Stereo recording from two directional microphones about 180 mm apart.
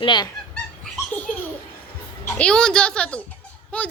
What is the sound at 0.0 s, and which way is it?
Speech, 25° left (ahead or behind).